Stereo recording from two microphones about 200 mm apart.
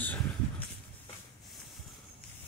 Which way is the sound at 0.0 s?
10° left (ahead or behind).